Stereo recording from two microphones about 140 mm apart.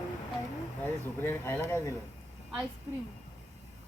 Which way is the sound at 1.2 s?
15° left (ahead or behind).